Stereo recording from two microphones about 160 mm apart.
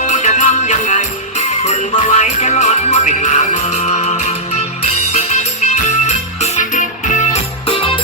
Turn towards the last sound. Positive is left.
turn(degrees=50)  # may be behind; listen again after turning